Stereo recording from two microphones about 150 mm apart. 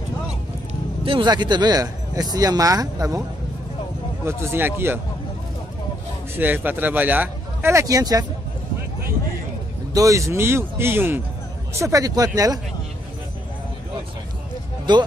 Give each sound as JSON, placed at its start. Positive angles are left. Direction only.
{"t": 1.0, "sound": "speech", "side_deg": -30}
{"t": 4.2, "sound": "speech", "side_deg": -15}
{"t": 6.3, "sound": "speech", "side_deg": -10}
{"t": 9.9, "sound": "speech", "side_deg": -20}
{"t": 14.9, "sound": "speech", "side_deg": -30}